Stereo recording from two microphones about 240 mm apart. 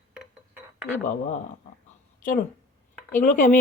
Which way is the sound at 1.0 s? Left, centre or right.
Left.